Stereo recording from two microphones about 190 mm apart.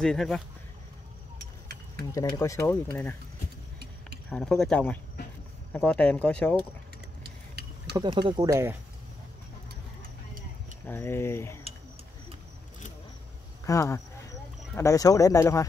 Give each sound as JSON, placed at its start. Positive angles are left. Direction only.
{"t": 0.0, "sound": "speech", "side_deg": 5}
{"t": 2.1, "sound": "speech", "side_deg": 15}
{"t": 4.3, "sound": "speech", "side_deg": 5}
{"t": 7.9, "sound": "speech", "side_deg": -25}
{"t": 10.9, "sound": "speech", "side_deg": 10}
{"t": 13.7, "sound": "speech", "side_deg": 15}